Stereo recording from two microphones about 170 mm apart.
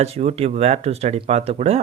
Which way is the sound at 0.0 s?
40° right (ahead or behind).